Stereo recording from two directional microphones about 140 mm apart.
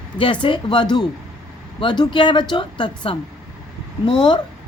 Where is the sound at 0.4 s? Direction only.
35° left (ahead or behind).